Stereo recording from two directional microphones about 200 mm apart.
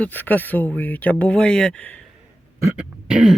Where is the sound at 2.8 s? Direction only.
5° right (ahead or behind).